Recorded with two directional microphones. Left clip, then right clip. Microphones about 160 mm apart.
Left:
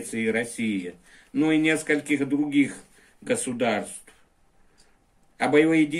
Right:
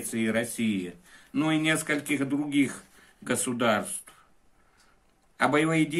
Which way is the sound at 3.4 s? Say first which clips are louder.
Right 3 dB; 55° right (ahead or behind).